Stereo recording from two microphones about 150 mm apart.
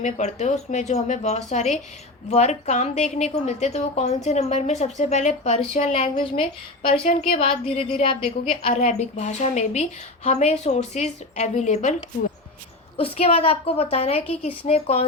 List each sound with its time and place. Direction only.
0.0 s a woman's voice: 50° left (ahead or behind)
13.0 s a woman's voice: 40° left (ahead or behind)